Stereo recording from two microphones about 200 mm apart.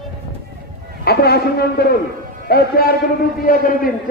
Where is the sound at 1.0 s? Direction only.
50° left (ahead or behind).